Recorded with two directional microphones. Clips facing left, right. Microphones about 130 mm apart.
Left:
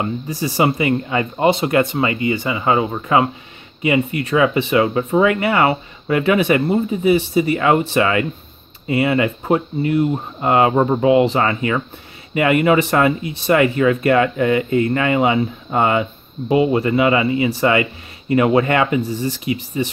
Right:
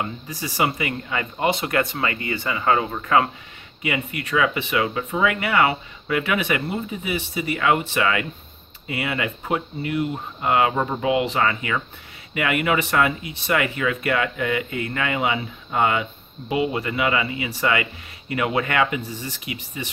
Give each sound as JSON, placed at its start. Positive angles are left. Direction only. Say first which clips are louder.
{"t": 0.0, "sound": "speech", "louder": "left 7 dB", "side_deg": 30}